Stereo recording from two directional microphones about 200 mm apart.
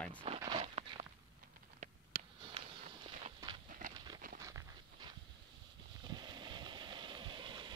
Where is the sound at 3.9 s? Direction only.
20° right (ahead or behind).